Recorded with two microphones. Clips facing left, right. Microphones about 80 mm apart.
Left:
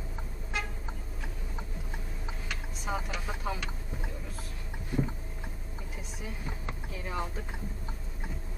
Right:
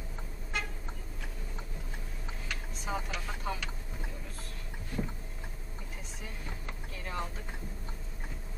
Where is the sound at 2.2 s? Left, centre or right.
Centre.